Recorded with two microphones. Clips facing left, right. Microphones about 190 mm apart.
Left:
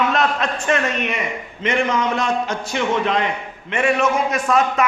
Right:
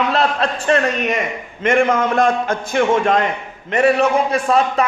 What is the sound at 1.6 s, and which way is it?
A man's voice, 50° right (ahead or behind).